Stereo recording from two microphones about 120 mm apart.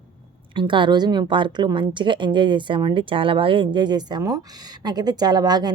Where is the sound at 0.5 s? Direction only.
40° right (ahead or behind).